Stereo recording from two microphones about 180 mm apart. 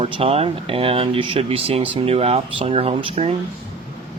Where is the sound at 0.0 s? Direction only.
30° right (ahead or behind).